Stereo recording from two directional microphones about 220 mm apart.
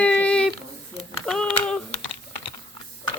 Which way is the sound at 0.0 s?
5° left (ahead or behind).